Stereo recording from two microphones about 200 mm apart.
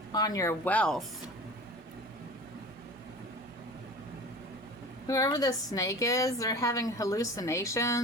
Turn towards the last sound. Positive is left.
turn(degrees=15)  # may be behind; listen again after turning